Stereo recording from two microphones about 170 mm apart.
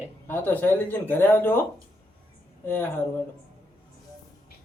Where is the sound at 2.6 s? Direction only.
10° left (ahead or behind).